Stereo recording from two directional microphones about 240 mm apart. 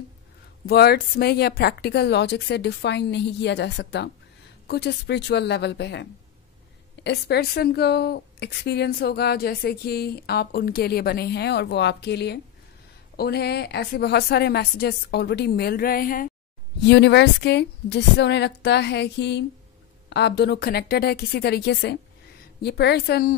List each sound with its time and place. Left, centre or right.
0.7 s a woman's voice: left